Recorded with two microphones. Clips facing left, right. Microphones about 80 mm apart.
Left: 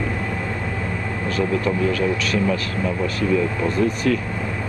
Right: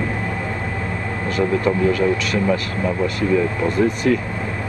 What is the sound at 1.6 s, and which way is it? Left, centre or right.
Speech, right.